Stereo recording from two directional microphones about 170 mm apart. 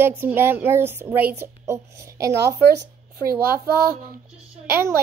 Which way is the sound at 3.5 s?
60° right (ahead or behind).